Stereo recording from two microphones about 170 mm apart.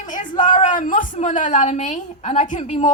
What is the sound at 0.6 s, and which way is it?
A woman's voice, 50° left (ahead or behind).